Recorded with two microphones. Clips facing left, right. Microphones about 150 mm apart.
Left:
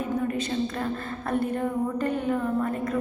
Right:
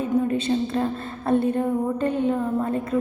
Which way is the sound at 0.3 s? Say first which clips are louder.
Right 5 dB; 25° right (ahead or behind).